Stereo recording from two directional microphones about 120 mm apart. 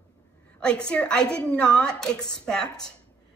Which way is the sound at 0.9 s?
5° left (ahead or behind).